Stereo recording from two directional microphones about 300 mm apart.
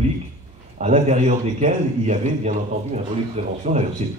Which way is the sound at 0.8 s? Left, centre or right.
Right.